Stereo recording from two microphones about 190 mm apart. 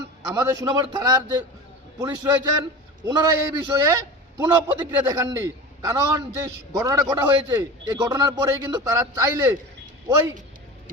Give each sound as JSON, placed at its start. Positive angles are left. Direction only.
{"t": 0.3, "sound": "a man's voice", "side_deg": -20}